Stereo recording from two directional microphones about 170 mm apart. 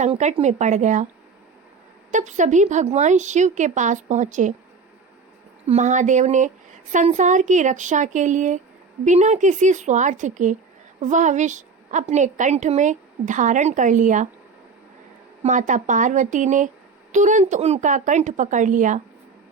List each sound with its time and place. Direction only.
0.0 s a woman's voice: 40° right (ahead or behind)
2.1 s a woman's voice: 45° right (ahead or behind)
5.6 s a woman's voice: 45° right (ahead or behind)
15.4 s a woman's voice: 50° right (ahead or behind)